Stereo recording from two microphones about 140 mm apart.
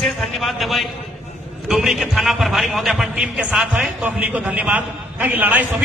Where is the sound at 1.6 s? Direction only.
5° right (ahead or behind).